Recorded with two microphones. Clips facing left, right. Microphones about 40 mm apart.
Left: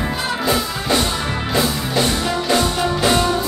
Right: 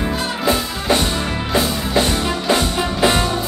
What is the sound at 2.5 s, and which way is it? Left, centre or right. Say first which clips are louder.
Music: even; centre.